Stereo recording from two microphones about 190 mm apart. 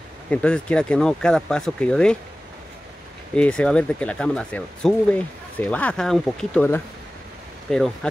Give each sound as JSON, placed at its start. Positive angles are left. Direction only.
{"t": 0.3, "sound": "speech", "side_deg": 5}
{"t": 3.3, "sound": "speech", "side_deg": 5}